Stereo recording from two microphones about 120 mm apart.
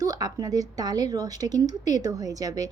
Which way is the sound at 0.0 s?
30° right (ahead or behind).